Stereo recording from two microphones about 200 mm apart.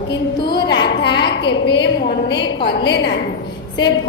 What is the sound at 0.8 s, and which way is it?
Speech, 60° left (ahead or behind).